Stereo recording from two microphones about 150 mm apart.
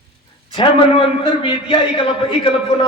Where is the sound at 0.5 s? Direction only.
35° left (ahead or behind).